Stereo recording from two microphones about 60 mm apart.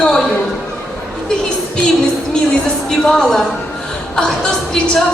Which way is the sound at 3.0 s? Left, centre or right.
Centre.